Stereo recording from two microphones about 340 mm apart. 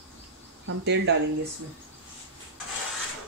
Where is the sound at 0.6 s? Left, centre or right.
Right.